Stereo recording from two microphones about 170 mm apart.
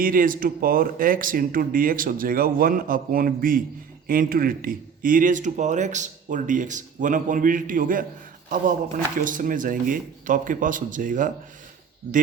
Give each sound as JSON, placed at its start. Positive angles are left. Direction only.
{"t": 0.0, "sound": "speech", "side_deg": -55}
{"t": 9.2, "sound": "speech", "side_deg": -50}